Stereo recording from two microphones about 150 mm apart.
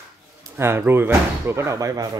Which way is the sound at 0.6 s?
15° right (ahead or behind).